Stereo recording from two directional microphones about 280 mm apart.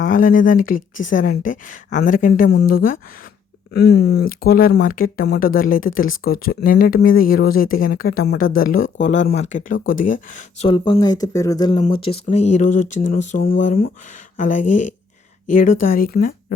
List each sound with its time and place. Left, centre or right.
0.0 s speech: left